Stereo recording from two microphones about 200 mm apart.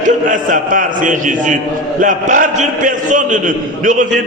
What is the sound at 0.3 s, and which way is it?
A man's voice, 45° right (ahead or behind).